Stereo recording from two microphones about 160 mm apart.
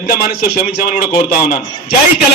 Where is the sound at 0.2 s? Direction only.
75° left (ahead or behind).